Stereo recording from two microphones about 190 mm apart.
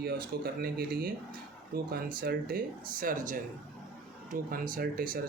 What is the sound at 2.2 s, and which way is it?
Speech, 50° right (ahead or behind).